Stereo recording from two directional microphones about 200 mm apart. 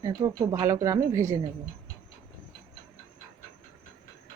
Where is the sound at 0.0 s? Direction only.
15° right (ahead or behind).